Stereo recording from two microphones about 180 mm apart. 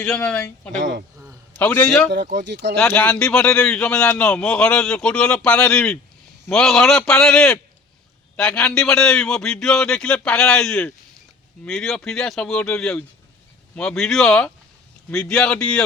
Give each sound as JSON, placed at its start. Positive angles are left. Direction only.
{"t": 0.0, "sound": "a man's voice", "side_deg": 5}
{"t": 0.8, "sound": "speech", "side_deg": -85}
{"t": 1.5, "sound": "a man's voice", "side_deg": 10}
{"t": 2.0, "sound": "speech", "side_deg": -75}
{"t": 2.7, "sound": "a man's voice", "side_deg": 10}